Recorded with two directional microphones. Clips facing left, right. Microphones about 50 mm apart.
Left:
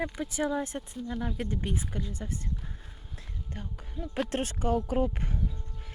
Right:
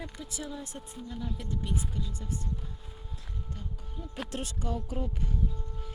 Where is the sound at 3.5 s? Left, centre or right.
Left.